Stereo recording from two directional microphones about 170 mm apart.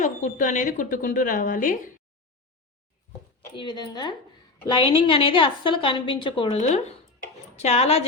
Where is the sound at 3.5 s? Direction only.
25° left (ahead or behind).